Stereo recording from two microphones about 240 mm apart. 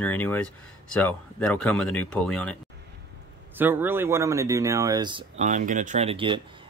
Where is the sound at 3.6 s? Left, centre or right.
Centre.